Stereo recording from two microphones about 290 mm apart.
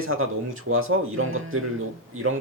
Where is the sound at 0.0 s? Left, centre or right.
Right.